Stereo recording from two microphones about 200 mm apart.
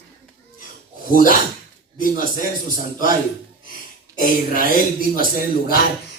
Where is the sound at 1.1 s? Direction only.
45° left (ahead or behind).